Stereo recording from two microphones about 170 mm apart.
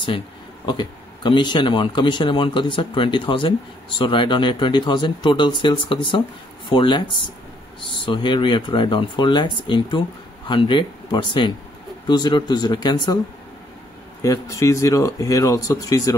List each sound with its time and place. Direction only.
0.7 s speech: 25° left (ahead or behind)
14.2 s speech: 20° left (ahead or behind)